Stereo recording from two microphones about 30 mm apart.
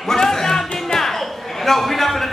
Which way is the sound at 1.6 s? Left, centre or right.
Centre.